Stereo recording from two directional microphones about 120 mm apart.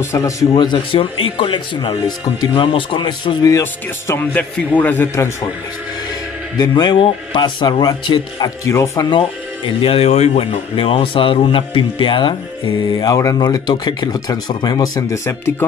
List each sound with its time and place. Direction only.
0.0 s speech: 25° left (ahead or behind)
0.6 s speech: 40° left (ahead or behind)
4.1 s a man's voice: 15° left (ahead or behind)
6.6 s speech: 35° left (ahead or behind)
8.6 s speech: 25° left (ahead or behind)
9.8 s speech: 55° left (ahead or behind); by 15.5 s 25° left (ahead or behind)